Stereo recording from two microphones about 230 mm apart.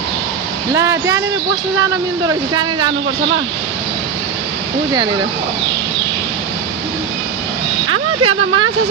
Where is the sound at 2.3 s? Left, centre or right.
Centre.